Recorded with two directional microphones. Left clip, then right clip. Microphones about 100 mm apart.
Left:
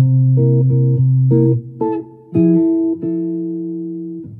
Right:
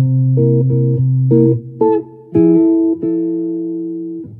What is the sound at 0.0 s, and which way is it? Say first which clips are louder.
Music: right 2 dB; centre (ahead or behind).